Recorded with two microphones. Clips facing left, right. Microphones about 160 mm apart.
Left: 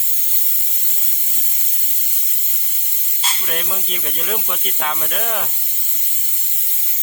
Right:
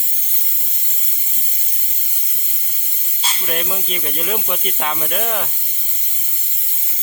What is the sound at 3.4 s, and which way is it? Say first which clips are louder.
Speech: right 5 dB; 5° right (ahead or behind).